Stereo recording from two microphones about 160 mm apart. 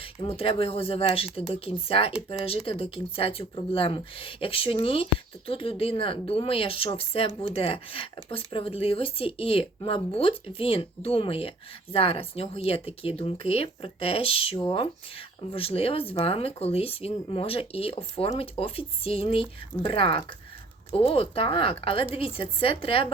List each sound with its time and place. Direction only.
0.0 s speech: 35° left (ahead or behind)